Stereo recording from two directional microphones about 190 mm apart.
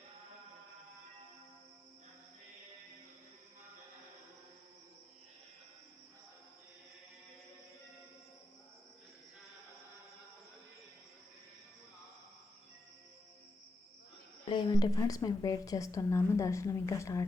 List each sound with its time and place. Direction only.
14.5 s a woman's voice: 20° left (ahead or behind)